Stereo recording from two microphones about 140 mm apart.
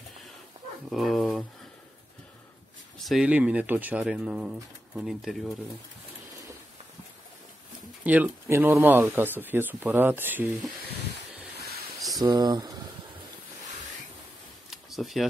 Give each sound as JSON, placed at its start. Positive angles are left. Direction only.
{"t": 0.8, "sound": "dog", "side_deg": 0}
{"t": 3.1, "sound": "speech", "side_deg": -5}
{"t": 8.0, "sound": "speech", "side_deg": -10}
{"t": 12.4, "sound": "speech", "side_deg": -30}
{"t": 14.7, "sound": "a sound", "side_deg": 0}